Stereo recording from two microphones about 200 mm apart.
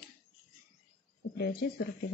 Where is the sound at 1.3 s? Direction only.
55° left (ahead or behind).